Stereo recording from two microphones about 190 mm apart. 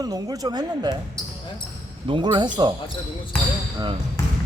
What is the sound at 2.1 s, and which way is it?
Speech, 25° right (ahead or behind).